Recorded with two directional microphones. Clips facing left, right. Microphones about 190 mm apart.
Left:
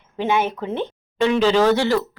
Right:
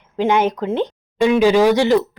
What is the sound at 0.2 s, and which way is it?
Speech, 15° right (ahead or behind).